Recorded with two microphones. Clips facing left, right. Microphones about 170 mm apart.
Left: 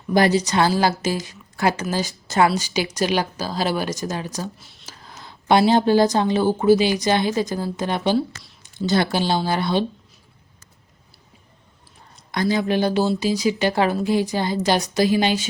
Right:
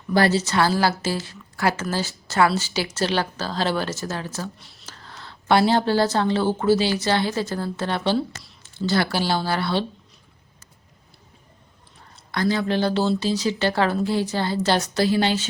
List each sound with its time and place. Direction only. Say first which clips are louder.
0.1 s a woman's voice: left 2 dB; 15° left (ahead or behind)
4.5 s speech: left 1 dB; centre (ahead or behind)
4.9 s a woman's voice: even; 10° left (ahead or behind)
12.1 s a woman's voice: left 1 dB; 15° left (ahead or behind)